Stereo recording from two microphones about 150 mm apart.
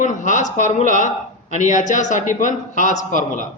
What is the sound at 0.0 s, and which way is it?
Speech, 55° left (ahead or behind).